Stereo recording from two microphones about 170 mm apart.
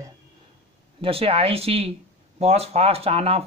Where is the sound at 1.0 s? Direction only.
35° right (ahead or behind).